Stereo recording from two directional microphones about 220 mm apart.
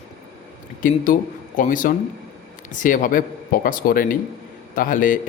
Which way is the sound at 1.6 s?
35° left (ahead or behind).